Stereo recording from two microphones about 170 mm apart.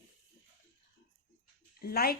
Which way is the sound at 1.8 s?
65° left (ahead or behind).